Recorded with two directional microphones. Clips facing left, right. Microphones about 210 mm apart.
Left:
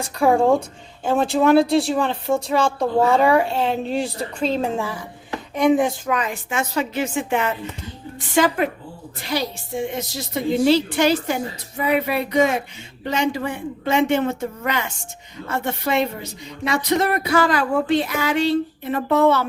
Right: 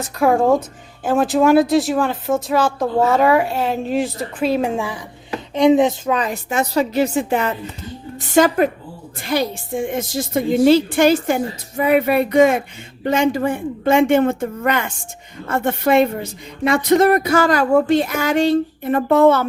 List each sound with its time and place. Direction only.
0.0 s a woman's voice: centre (ahead or behind); by 19.5 s 50° right (ahead or behind)